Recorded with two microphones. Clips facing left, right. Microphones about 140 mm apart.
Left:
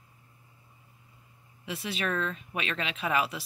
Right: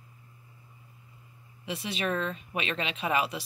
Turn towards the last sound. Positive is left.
turn(degrees=0)  # may be behind; listen again after turning